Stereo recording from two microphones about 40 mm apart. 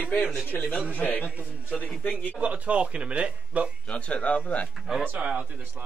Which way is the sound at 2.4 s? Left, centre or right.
Right.